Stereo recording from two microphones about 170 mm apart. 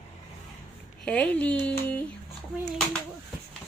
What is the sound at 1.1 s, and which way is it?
Speech, 5° left (ahead or behind).